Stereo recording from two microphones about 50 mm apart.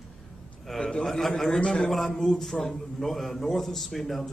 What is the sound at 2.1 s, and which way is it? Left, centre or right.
A man's voice, centre.